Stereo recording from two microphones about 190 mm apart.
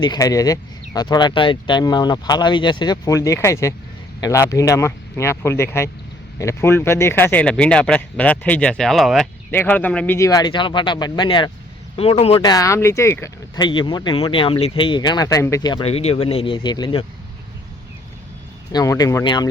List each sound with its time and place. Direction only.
0.0 s speech: 20° left (ahead or behind)
10.2 s speech: 20° left (ahead or behind)
13.7 s speech: 25° left (ahead or behind)
18.7 s speech: 20° left (ahead or behind)